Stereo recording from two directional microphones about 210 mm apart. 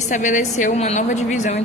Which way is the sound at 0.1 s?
35° left (ahead or behind).